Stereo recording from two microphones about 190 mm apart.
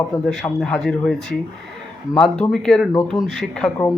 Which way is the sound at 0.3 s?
5° left (ahead or behind).